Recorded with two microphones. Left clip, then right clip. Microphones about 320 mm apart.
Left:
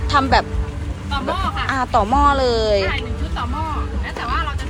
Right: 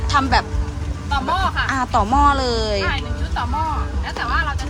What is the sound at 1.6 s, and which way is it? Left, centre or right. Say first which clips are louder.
Speech: left 1 dB; centre.